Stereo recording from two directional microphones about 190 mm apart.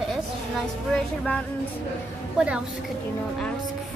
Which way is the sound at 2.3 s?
5° right (ahead or behind).